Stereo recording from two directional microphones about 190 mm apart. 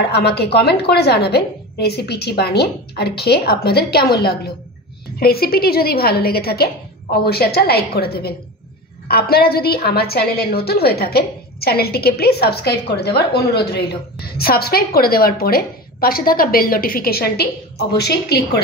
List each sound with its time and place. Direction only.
0.1 s a woman's voice: 60° left (ahead or behind)